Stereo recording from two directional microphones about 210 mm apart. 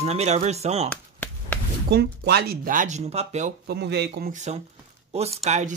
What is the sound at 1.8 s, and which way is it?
Speech, 50° right (ahead or behind).